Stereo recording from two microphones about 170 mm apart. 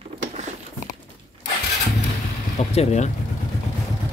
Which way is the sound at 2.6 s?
40° left (ahead or behind).